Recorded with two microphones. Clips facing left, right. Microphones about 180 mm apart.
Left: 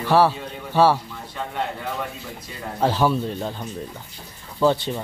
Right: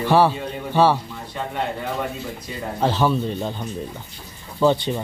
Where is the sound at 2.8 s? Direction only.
10° left (ahead or behind).